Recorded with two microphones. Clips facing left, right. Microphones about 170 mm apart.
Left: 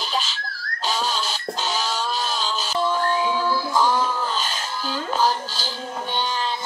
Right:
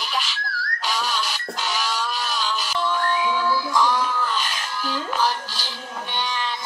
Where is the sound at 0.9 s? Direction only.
25° left (ahead or behind).